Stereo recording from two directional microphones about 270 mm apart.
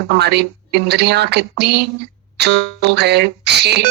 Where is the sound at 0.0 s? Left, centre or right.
Right.